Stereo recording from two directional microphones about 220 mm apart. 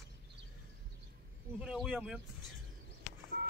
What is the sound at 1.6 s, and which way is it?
Speech, centre (ahead or behind).